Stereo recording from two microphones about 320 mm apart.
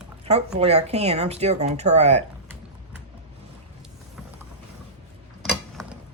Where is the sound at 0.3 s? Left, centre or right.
Centre.